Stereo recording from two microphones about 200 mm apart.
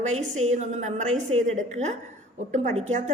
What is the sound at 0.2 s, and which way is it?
A woman's voice, 35° right (ahead or behind).